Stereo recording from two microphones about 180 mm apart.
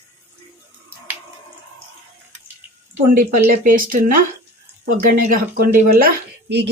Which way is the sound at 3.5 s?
50° right (ahead or behind).